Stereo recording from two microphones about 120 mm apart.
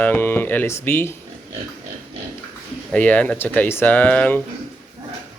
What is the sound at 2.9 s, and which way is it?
Speech, 10° left (ahead or behind).